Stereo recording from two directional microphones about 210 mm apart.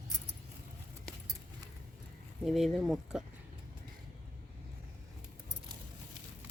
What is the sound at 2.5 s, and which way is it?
Speech, centre (ahead or behind).